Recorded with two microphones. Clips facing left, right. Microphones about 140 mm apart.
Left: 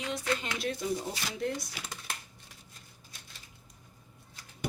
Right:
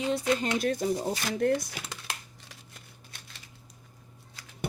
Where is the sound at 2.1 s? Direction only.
80° right.